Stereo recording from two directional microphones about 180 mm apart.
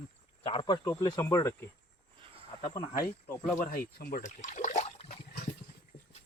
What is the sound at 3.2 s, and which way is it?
Speech, 5° left (ahead or behind).